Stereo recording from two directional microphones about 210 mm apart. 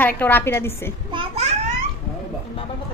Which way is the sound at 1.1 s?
25° right (ahead or behind).